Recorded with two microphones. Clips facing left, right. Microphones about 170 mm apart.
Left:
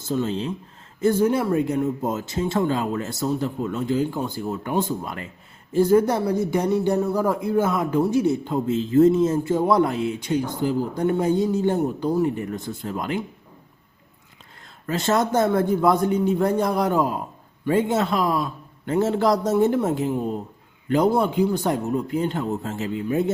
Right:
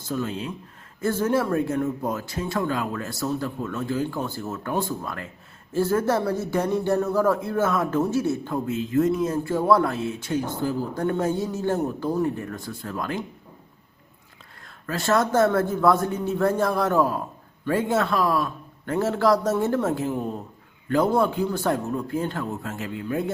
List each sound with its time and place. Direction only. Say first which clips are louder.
0.1 s speech: left 4 dB; 25° left (ahead or behind)
1.0 s speech: left 3 dB; 15° left (ahead or behind)
14.8 s speech: left 1 dB; 20° left (ahead or behind)